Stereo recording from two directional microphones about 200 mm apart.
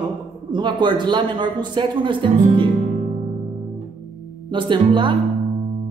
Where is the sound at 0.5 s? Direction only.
20° right (ahead or behind).